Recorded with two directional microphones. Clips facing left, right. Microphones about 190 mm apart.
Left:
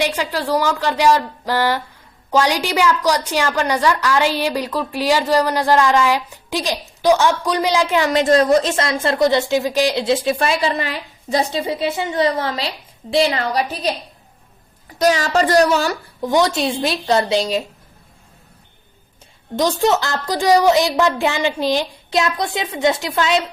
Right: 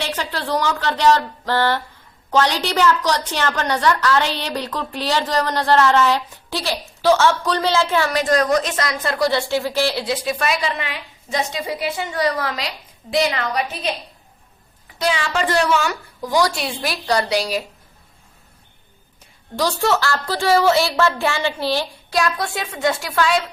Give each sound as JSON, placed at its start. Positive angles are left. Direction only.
{"t": 0.0, "sound": "a woman's voice", "side_deg": 10}
{"t": 14.9, "sound": "a woman's voice", "side_deg": 40}
{"t": 16.2, "sound": "a child's voice", "side_deg": 25}
{"t": 19.5, "sound": "a child's voice", "side_deg": 20}